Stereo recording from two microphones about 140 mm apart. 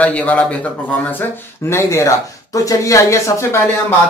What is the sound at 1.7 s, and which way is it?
Speech, 20° left (ahead or behind).